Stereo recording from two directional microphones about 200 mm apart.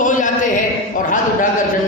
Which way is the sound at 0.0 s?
40° left (ahead or behind).